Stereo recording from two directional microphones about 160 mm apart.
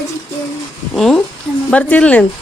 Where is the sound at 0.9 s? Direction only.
5° left (ahead or behind).